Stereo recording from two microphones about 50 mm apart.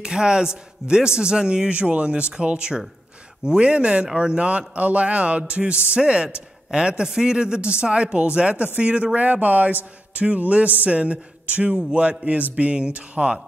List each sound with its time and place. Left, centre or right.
0.0 s a man's voice: centre